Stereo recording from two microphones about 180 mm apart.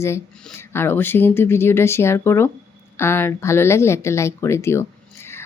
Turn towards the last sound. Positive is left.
turn(degrees=15)  # may be behind; listen again after turning